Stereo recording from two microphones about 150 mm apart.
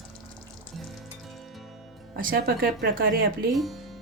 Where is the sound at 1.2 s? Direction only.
Centre (ahead or behind).